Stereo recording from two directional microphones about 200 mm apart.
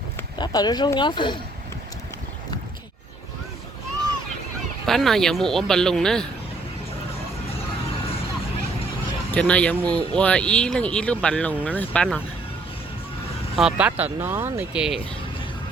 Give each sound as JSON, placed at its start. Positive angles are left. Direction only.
{"t": 0.3, "sound": "speech", "side_deg": 20}
{"t": 4.9, "sound": "speech", "side_deg": 0}
{"t": 9.3, "sound": "speech", "side_deg": 5}
{"t": 9.9, "sound": "speech", "side_deg": -20}
{"t": 10.2, "sound": "speech", "side_deg": 5}
{"t": 13.6, "sound": "speech", "side_deg": -5}